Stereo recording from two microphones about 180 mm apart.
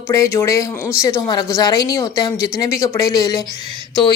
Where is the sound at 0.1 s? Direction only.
15° left (ahead or behind).